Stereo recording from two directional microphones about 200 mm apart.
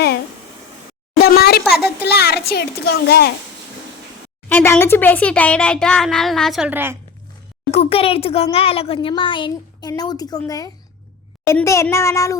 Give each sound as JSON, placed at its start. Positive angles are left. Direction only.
{"t": 1.2, "sound": "a sound", "side_deg": 50}
{"t": 2.0, "sound": "a child's voice", "side_deg": 50}
{"t": 4.4, "sound": "speech", "side_deg": 10}
{"t": 7.7, "sound": "speech", "side_deg": 30}